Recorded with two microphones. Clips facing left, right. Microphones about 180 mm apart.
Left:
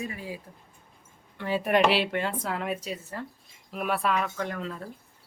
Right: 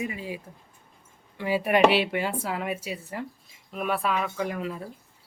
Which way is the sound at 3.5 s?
Centre (ahead or behind).